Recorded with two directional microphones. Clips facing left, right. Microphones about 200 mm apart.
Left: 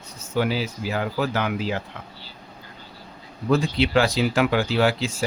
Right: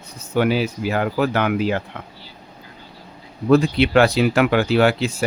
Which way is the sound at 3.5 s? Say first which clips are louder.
Right 6 dB; 60° right (ahead or behind).